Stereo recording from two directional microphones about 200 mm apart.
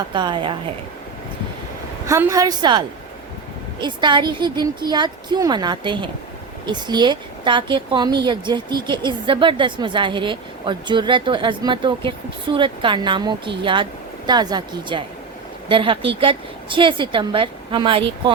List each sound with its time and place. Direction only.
0.1 s a woman's voice: 25° right (ahead or behind)
2.0 s a woman's voice: 15° right (ahead or behind)